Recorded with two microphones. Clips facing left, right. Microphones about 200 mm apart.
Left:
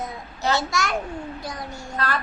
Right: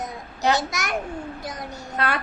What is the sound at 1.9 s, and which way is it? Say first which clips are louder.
Speech: right 1 dB; 60° right (ahead or behind).